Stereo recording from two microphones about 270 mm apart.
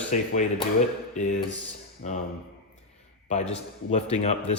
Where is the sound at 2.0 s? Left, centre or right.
Left.